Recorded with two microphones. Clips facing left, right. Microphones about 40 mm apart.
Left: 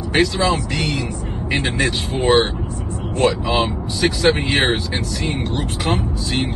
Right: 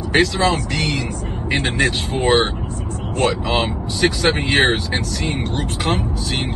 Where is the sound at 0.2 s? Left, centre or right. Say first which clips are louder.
Left 1 dB; right.